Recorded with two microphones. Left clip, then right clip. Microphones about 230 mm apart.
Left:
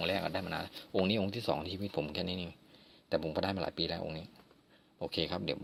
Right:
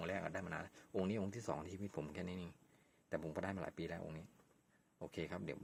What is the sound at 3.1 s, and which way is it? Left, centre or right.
Speech, centre.